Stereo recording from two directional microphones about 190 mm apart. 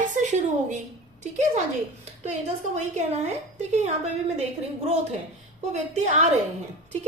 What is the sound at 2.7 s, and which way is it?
A woman's voice, 35° right (ahead or behind).